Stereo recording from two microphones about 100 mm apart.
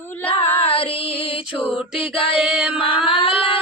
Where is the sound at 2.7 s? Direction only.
65° left (ahead or behind).